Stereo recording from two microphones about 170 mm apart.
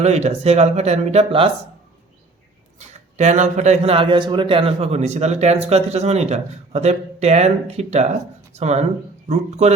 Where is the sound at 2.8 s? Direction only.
40° right (ahead or behind).